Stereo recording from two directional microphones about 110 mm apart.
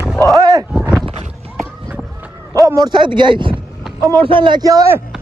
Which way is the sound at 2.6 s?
35° right (ahead or behind).